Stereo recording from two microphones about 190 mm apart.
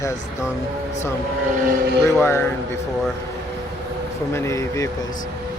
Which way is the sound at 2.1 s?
10° left (ahead or behind).